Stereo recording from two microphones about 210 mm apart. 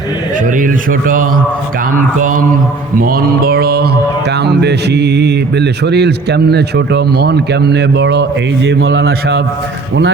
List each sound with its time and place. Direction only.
0.4 s speech: 40° right (ahead or behind)